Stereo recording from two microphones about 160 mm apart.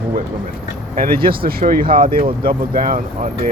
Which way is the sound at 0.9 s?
60° right (ahead or behind).